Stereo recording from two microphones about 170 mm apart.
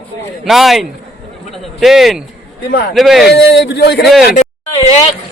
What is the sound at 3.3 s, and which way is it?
Speech, 85° left.